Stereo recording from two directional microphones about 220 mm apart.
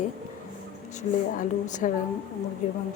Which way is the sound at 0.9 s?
35° left (ahead or behind).